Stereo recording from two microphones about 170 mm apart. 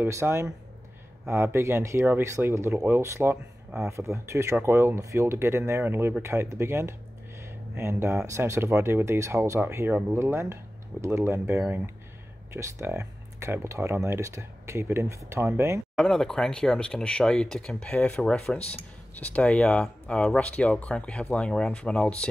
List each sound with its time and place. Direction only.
0.0 s speech: 15° right (ahead or behind)
7.4 s a sound: 15° right (ahead or behind)
8.3 s speech: 15° right (ahead or behind)
16.0 s speech: centre (ahead or behind)